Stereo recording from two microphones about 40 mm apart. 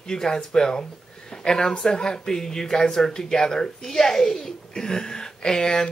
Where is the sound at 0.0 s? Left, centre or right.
Centre.